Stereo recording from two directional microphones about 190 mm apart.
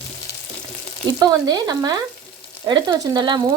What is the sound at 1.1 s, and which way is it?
Speech, 20° right (ahead or behind).